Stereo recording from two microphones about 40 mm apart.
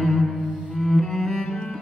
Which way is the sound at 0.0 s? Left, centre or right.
Centre.